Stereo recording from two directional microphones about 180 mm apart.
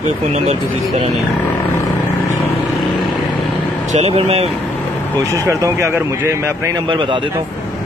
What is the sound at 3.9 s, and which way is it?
Speech, 35° right (ahead or behind).